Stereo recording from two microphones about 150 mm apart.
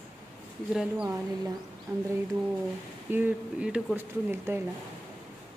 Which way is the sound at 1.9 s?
15° right (ahead or behind).